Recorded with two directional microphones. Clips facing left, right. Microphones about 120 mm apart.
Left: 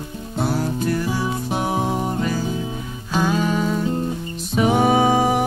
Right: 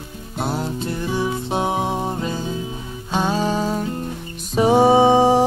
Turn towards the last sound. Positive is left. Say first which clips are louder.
# right 4 dB
turn(degrees=-25)  # may be behind; listen again after turning